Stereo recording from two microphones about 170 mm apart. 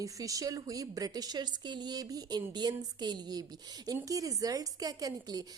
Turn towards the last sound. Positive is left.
turn(degrees=-20)  # may be behind; listen again after turning